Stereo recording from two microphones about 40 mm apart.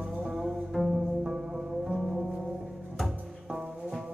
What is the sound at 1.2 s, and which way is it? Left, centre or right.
Music, centre.